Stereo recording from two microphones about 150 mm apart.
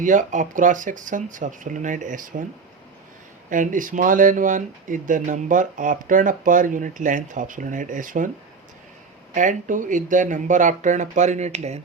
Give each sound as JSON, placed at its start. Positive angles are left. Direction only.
{"t": 0.0, "sound": "speech", "side_deg": -55}
{"t": 3.5, "sound": "speech", "side_deg": -60}
{"t": 9.3, "sound": "speech", "side_deg": -60}